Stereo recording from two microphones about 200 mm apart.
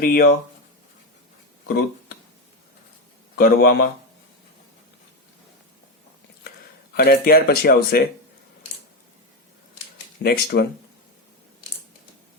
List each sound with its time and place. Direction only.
0.0 s speech: 50° left (ahead or behind)
1.6 s a sound: 55° left (ahead or behind)
3.3 s speech: 50° left (ahead or behind)
6.9 s speech: 50° left (ahead or behind)
10.2 s speech: 55° left (ahead or behind)